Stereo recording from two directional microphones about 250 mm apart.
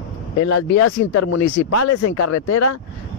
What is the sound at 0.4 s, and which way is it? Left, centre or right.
Speech, left.